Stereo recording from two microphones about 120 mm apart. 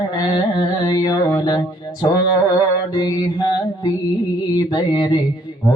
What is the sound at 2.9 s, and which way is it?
Mantra, 30° left (ahead or behind).